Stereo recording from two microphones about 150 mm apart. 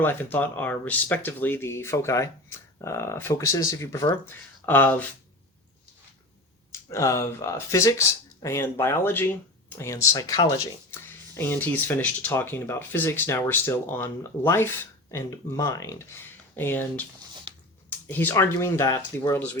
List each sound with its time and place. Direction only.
0.0 s speech: 15° left (ahead or behind)
6.7 s speech: 20° left (ahead or behind)
17.8 s speech: 10° left (ahead or behind)